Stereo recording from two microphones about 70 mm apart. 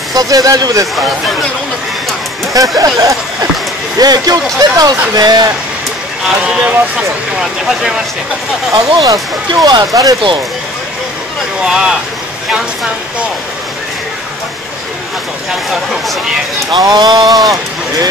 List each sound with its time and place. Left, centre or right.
0.1 s speech: right
2.5 s speech: right
4.0 s speech: right
6.4 s speech: centre
9.0 s speech: right
11.6 s speech: centre
16.7 s speech: right